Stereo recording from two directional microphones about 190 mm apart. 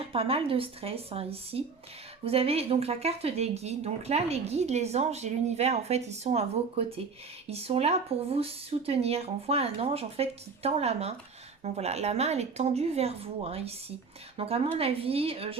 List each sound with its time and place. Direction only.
0.1 s speech: 30° right (ahead or behind)